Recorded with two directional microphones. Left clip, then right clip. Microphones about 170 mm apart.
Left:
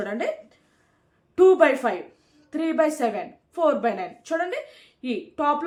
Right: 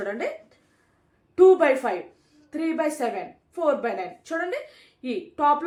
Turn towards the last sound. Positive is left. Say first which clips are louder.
# right 2 dB
turn(degrees=15)  # may be behind; listen again after turning